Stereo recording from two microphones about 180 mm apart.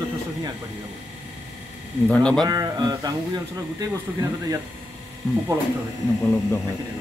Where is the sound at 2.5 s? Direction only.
20° right (ahead or behind).